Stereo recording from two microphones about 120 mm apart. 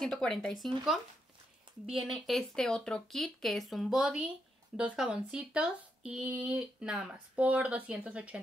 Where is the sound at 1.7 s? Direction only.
45° right (ahead or behind).